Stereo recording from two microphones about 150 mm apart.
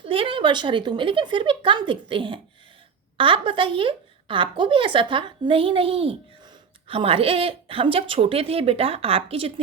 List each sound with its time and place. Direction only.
0.0 s a woman's voice: 35° right (ahead or behind)